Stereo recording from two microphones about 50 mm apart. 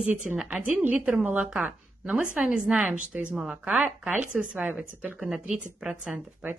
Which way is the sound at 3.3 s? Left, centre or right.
Centre.